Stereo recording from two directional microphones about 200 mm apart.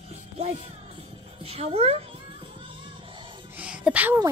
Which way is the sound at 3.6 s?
5° right (ahead or behind).